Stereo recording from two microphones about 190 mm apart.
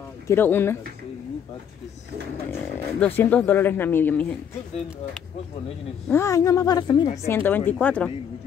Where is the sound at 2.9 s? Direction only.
10° left (ahead or behind).